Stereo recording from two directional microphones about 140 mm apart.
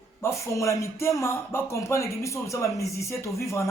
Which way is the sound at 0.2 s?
20° left (ahead or behind).